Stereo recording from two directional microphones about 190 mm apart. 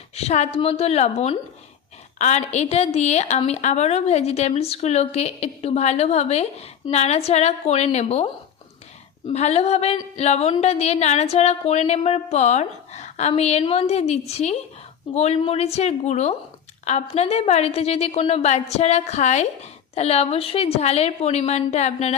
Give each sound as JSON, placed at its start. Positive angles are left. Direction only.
{"t": 0.2, "sound": "a woman's voice", "side_deg": 35}